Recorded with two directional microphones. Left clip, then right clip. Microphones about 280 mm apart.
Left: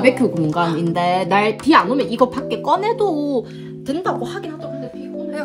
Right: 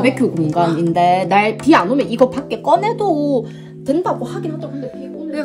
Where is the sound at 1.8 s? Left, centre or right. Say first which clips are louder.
Right 1 dB; left.